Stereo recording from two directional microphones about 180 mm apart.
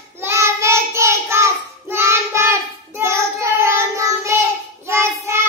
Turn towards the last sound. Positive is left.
turn(degrees=-15)  # may be behind; listen again after turning